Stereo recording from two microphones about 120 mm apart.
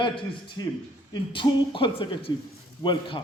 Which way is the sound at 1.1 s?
45° left (ahead or behind).